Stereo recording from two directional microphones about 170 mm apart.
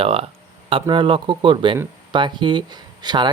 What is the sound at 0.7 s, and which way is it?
Speech, 30° right (ahead or behind).